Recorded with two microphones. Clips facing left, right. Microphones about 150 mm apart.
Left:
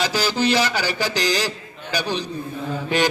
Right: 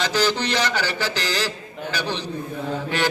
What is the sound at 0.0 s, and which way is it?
Mantra, 10° left (ahead or behind).